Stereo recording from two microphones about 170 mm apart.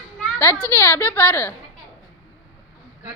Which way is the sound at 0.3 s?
15° left (ahead or behind).